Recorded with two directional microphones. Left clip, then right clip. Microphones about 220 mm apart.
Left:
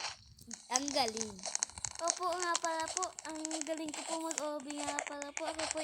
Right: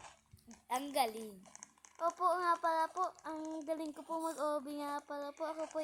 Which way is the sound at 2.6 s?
5° left (ahead or behind).